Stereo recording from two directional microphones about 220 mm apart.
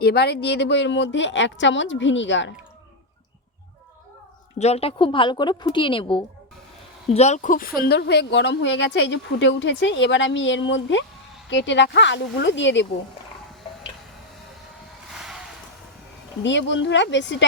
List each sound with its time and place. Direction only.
0.0 s a woman's voice: 45° left (ahead or behind)
4.5 s speech: 30° left (ahead or behind)
7.8 s a woman's voice: 45° left (ahead or behind)
15.1 s vehicle: centre (ahead or behind)
16.4 s a woman's voice: 55° left (ahead or behind)